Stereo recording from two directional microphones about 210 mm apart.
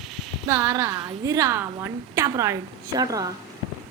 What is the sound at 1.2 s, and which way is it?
A woman's voice, 15° right (ahead or behind).